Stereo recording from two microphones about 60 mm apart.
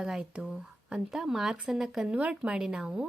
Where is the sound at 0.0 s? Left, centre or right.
Centre.